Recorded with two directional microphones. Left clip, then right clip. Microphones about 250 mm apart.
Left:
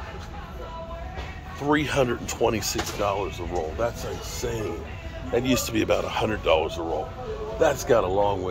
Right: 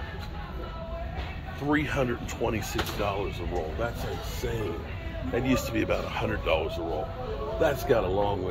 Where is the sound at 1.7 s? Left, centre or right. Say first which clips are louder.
Left 5 dB; left.